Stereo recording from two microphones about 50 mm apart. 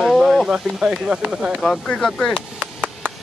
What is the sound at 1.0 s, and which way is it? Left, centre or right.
Speech, centre.